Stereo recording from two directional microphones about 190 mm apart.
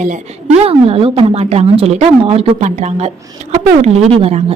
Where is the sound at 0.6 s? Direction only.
30° right (ahead or behind).